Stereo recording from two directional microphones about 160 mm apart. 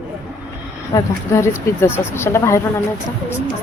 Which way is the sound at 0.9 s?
15° left (ahead or behind).